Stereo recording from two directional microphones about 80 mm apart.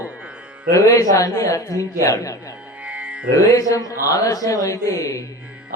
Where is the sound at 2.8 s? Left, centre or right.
Centre.